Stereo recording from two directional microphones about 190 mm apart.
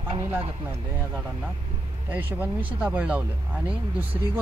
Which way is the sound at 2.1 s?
10° right (ahead or behind).